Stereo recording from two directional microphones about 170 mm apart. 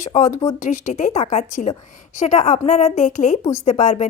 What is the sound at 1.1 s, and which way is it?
A woman's voice, 40° left (ahead or behind).